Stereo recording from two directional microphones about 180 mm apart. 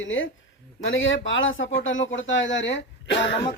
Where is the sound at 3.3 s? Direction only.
30° left (ahead or behind).